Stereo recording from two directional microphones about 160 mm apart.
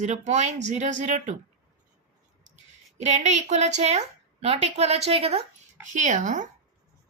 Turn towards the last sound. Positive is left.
turn(degrees=-50)  # may be behind; listen again after turning